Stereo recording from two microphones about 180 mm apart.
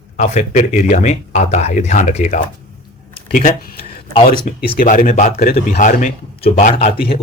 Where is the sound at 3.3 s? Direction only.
45° left (ahead or behind).